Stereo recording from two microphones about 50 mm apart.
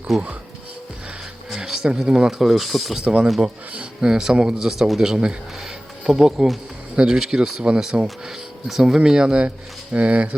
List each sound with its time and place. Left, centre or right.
0.1 s speech: centre
1.5 s speech: centre
2.9 s speech: centre